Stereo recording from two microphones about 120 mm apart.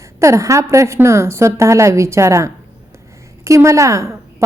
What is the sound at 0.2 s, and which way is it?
A woman's voice, 25° right (ahead or behind).